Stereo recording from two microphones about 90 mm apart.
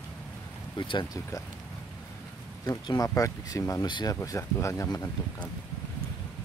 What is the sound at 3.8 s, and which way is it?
Speech, 55° left (ahead or behind).